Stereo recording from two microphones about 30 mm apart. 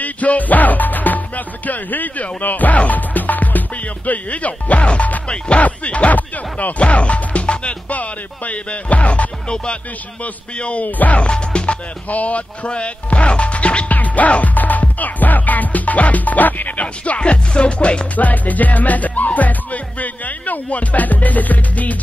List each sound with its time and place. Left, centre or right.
0.0 s music: left
2.4 s speech: left
5.6 s music: left
6.1 s speech: left
6.8 s speech: left
7.9 s music: left
10.8 s music: left
11.1 s music: left
12.1 s music: left
12.6 s speech: left
13.8 s music: left
16.8 s music: left
17.2 s music: left
18.1 s music: left